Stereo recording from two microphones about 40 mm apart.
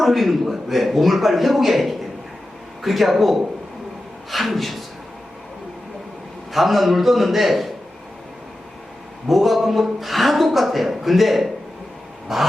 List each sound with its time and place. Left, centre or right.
0.0 s a man's voice: centre
6.5 s a man's voice: centre
9.2 s a man's voice: centre
12.3 s a sound: centre